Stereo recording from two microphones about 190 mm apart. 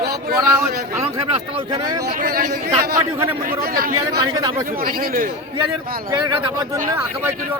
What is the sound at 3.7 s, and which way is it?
Speech, 50° right (ahead or behind).